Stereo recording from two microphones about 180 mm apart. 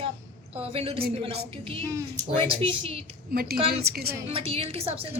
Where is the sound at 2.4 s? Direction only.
30° right (ahead or behind).